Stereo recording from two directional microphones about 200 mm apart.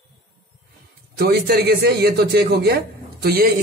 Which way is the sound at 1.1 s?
50° right (ahead or behind).